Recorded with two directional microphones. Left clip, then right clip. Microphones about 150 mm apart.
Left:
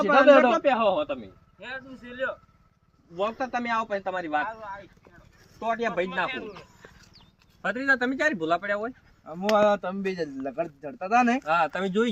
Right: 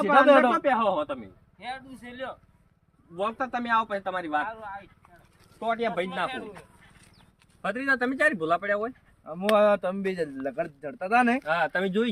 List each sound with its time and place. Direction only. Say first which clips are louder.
0.0 s a man's voice: left 1 dB; centre (ahead or behind)
1.5 s a man's voice: right 1 dB; 50° right (ahead or behind)
3.2 s speech: left 1 dB; centre (ahead or behind)
4.4 s speech: left 1 dB; 60° right (ahead or behind)
5.5 s speech: even; 20° right (ahead or behind)
7.6 s speech: left 2 dB; 40° right (ahead or behind)